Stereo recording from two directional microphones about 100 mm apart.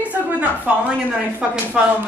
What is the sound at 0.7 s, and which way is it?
Speech, 10° right (ahead or behind).